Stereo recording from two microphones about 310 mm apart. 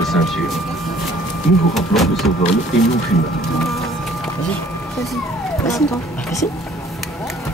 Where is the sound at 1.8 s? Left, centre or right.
Centre.